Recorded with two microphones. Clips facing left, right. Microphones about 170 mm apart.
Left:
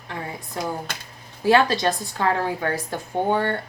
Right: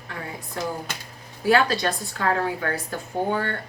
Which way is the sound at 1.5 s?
25° left (ahead or behind).